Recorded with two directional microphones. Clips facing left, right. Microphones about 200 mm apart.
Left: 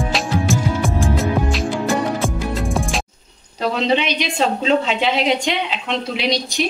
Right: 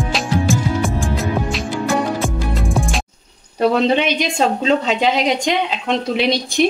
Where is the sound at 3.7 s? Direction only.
50° right (ahead or behind).